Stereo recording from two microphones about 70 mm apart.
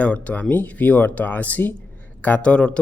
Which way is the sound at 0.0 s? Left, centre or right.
Centre.